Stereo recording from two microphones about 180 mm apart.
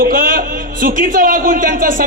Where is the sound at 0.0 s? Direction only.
50° right (ahead or behind).